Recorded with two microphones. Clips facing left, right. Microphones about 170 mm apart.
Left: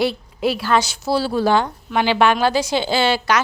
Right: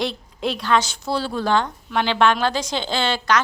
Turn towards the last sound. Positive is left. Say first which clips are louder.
# left 3 dB
turn(degrees=10)  # may be behind; listen again after turning